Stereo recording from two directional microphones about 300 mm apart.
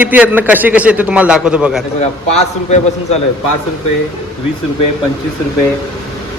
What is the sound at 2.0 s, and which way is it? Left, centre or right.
Speech, left.